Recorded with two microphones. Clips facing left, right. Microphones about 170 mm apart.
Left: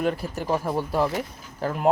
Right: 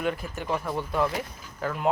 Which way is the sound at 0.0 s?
40° left (ahead or behind).